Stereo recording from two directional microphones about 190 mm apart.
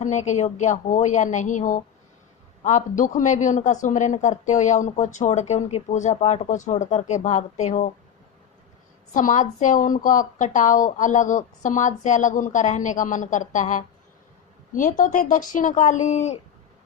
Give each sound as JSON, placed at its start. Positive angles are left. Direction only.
{"t": 0.0, "sound": "speech", "side_deg": 40}
{"t": 9.1, "sound": "speech", "side_deg": 40}